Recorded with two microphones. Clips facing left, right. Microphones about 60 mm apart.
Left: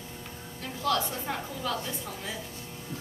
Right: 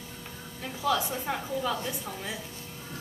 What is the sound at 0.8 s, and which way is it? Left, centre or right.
A woman's voice, centre.